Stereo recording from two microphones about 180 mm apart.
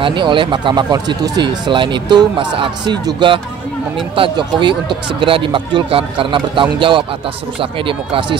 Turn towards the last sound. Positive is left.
turn(degrees=-30)  # may be behind; listen again after turning